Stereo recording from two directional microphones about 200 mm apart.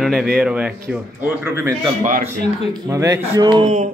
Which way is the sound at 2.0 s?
45° right (ahead or behind).